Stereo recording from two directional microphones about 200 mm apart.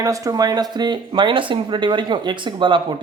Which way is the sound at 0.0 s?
15° right (ahead or behind).